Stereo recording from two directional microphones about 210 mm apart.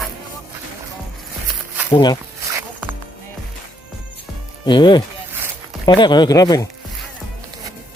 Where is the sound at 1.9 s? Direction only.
20° left (ahead or behind).